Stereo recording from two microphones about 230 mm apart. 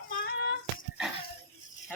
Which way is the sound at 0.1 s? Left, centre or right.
Left.